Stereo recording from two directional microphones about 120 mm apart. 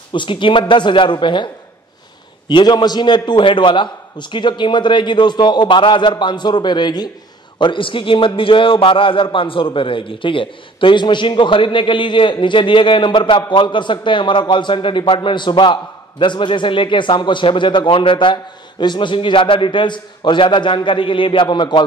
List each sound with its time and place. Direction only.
0.1 s a man's voice: 40° left (ahead or behind)